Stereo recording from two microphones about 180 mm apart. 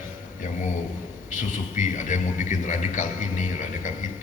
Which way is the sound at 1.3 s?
45° left (ahead or behind).